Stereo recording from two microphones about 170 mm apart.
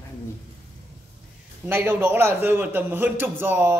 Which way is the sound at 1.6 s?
10° right (ahead or behind).